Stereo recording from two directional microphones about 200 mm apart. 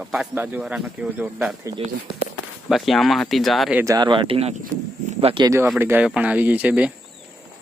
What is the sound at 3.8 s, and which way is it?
Speech, 20° right (ahead or behind).